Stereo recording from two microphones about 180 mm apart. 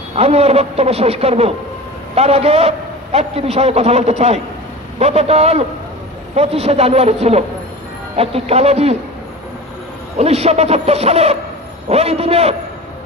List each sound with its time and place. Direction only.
0.1 s a man's voice: 35° right (ahead or behind)
10.1 s a man's voice: 35° right (ahead or behind)